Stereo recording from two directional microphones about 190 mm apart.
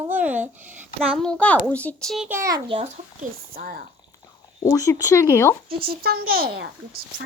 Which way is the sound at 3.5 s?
50° right (ahead or behind).